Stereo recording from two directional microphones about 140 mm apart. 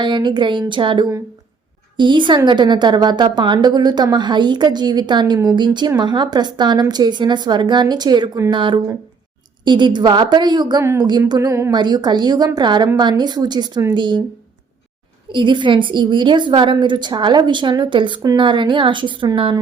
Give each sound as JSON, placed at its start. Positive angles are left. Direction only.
{"t": 0.0, "sound": "a woman's voice", "side_deg": -35}
{"t": 11.7, "sound": "a woman's voice", "side_deg": -30}
{"t": 15.3, "sound": "a woman's voice", "side_deg": -35}